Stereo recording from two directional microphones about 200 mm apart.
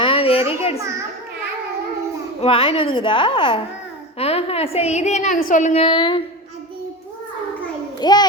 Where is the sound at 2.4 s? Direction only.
30° left (ahead or behind).